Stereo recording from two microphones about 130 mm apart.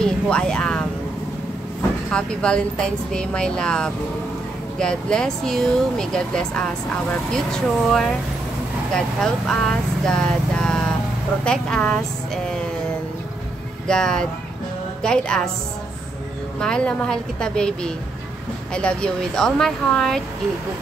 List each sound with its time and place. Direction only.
0.0 s speech: 5° left (ahead or behind)
2.0 s speech: 5° left (ahead or behind)
13.8 s speech: 5° left (ahead or behind)
16.5 s speech: 5° left (ahead or behind)